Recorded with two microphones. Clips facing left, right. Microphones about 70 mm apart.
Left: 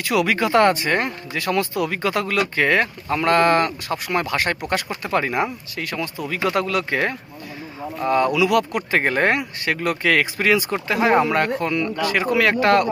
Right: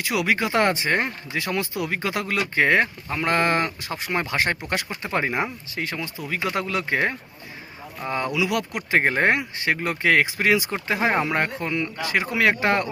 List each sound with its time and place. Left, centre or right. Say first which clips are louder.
0.0 s speech: left 3 dB; centre